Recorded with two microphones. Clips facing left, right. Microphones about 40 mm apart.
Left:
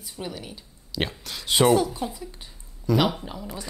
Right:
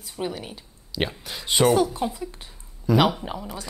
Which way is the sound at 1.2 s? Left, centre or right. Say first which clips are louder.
Right 1 dB; centre.